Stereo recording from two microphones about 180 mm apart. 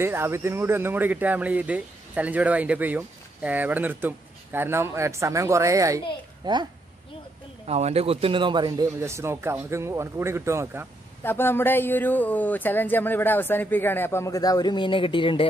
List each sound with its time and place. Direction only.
0.0 s a child's voice: 15° right (ahead or behind)
7.6 s speech: 35° right (ahead or behind); by 10.9 s 15° right (ahead or behind)
11.2 s speech: 10° left (ahead or behind); by 15.4 s 30° left (ahead or behind)